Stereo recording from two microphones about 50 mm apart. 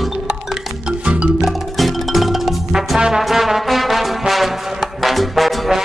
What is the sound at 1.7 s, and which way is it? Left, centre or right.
Music, centre.